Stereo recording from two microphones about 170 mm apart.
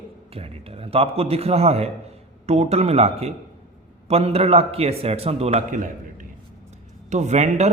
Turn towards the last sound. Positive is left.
turn(degrees=-40)  # may be behind; listen again after turning